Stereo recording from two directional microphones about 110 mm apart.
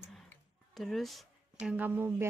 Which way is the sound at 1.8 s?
20° right (ahead or behind).